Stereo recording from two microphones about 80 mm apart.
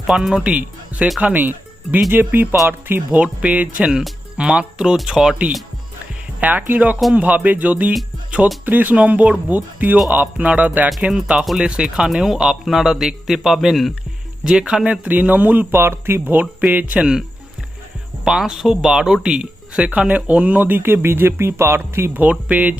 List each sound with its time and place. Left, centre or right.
0.1 s speech: centre
6.4 s speech: right
15.0 s speech: centre
16.2 s speech: right
18.3 s speech: centre; by 22.2 s right
22.2 s speech: centre